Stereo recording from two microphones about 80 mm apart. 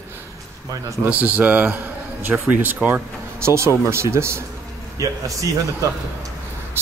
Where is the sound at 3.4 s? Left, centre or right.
Right.